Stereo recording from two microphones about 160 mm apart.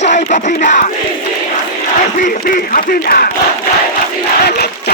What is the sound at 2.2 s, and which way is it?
Speech, 60° left (ahead or behind).